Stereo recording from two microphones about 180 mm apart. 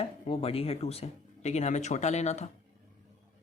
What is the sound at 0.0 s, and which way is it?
Speech, 35° left (ahead or behind).